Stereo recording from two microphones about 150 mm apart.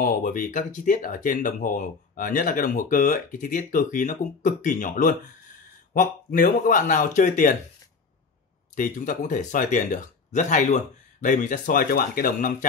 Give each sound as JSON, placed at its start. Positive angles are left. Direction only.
{"t": 0.0, "sound": "speech", "side_deg": 65}
{"t": 8.7, "sound": "speech", "side_deg": 60}